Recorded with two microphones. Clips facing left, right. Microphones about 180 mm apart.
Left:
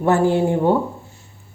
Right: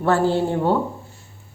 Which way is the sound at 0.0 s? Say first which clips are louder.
Left 2 dB; 15° left (ahead or behind).